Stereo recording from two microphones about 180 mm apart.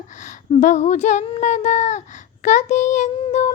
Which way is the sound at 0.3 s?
45° left (ahead or behind).